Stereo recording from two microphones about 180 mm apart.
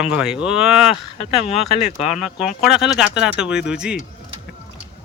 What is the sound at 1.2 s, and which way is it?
Speech, 35° left (ahead or behind).